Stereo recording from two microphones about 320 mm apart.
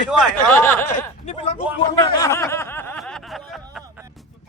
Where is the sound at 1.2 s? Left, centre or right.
Centre.